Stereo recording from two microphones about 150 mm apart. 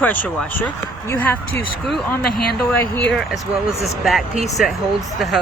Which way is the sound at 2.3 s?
90° left.